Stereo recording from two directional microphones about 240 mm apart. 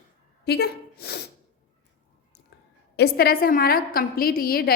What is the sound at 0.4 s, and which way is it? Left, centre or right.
Speech, left.